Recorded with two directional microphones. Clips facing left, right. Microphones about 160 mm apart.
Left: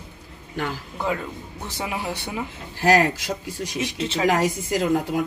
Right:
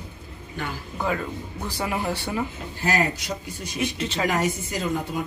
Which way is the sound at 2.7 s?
85° left.